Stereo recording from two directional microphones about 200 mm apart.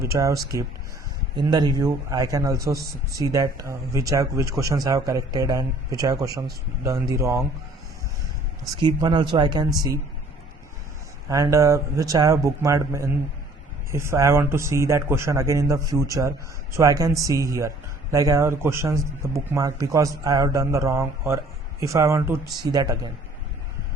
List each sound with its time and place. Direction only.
0.0 s speech: 15° right (ahead or behind)
8.7 s speech: 20° right (ahead or behind)
11.3 s speech: 15° right (ahead or behind)